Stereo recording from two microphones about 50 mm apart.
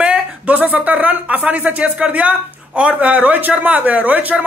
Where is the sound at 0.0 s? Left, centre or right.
Right.